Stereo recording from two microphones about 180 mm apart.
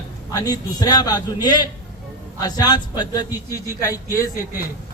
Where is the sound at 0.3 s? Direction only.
20° left (ahead or behind).